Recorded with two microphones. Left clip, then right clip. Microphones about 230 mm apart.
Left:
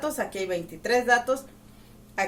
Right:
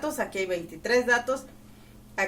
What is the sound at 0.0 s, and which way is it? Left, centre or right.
Speech, left.